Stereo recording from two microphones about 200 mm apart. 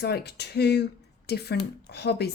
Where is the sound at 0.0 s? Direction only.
55° left (ahead or behind).